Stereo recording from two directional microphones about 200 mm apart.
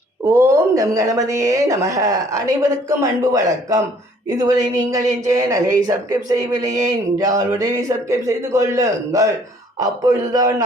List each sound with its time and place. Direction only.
0.3 s speech: 15° right (ahead or behind)